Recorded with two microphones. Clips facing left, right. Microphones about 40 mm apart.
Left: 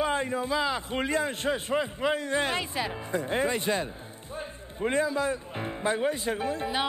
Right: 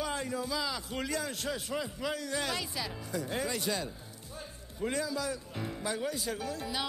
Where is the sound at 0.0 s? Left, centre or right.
Left.